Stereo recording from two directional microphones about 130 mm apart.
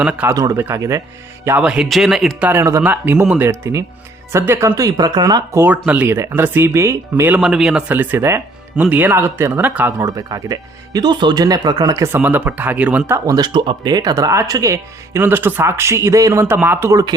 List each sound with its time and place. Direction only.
0.0 s speech: 10° right (ahead or behind)
1.5 s speech: 10° right (ahead or behind)
2.5 s speech: 20° right (ahead or behind)
7.3 s speech: 5° right (ahead or behind)
10.0 s speech: 25° right (ahead or behind)
12.0 s speech: 15° right (ahead or behind)
13.1 s speech: 30° right (ahead or behind)